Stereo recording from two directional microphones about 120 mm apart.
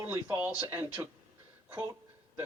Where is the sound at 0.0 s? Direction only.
20° right (ahead or behind).